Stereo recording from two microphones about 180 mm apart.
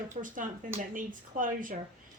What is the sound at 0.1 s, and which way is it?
Speech, 50° right (ahead or behind).